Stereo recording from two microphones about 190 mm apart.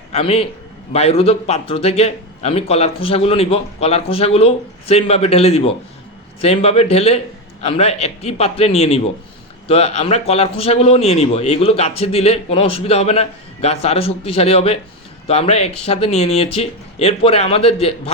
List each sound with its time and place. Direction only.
0.1 s a man's voice: 30° left (ahead or behind)